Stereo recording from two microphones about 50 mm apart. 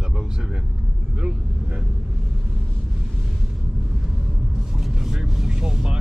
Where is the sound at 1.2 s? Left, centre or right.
Right.